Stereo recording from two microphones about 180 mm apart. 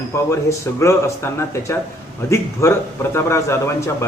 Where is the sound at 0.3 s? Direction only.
15° left (ahead or behind).